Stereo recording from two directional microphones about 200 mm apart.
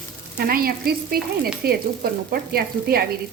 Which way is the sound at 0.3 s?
45° right (ahead or behind).